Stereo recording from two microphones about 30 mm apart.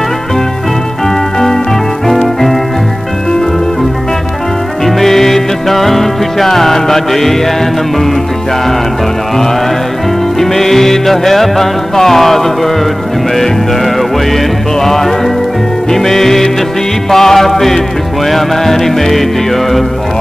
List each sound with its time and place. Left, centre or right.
4.8 s music: centre
10.4 s music: centre